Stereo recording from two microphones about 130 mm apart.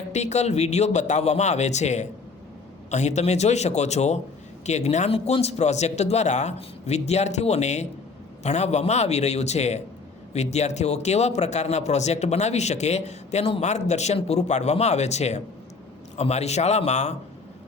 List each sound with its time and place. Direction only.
0.1 s speech: 60° left (ahead or behind)